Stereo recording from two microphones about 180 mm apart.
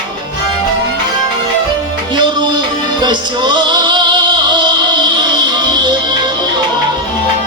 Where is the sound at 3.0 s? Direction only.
25° right (ahead or behind).